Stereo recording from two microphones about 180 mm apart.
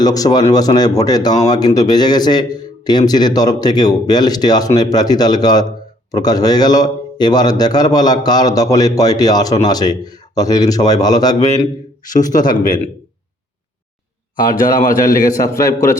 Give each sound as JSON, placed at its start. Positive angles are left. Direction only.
{"t": 0.0, "sound": "speech", "side_deg": 20}
{"t": 12.1, "sound": "a man's voice", "side_deg": 45}
{"t": 14.3, "sound": "a man's voice", "side_deg": 50}
{"t": 15.3, "sound": "speech", "side_deg": 20}